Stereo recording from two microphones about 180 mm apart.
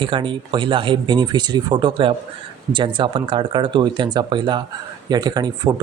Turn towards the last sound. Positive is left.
turn(degrees=-20)  # may be behind; listen again after turning